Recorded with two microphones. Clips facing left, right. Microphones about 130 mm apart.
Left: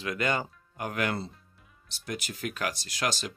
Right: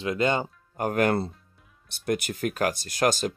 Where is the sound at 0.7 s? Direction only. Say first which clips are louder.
Right 8 dB; 45° right (ahead or behind).